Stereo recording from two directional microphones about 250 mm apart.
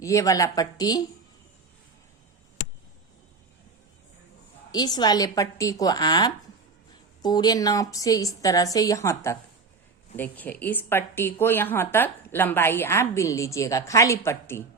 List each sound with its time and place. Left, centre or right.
0.0 s a woman's voice: centre
4.7 s a woman's voice: centre